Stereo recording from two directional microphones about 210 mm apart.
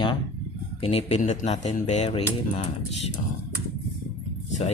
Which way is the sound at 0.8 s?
30° left (ahead or behind).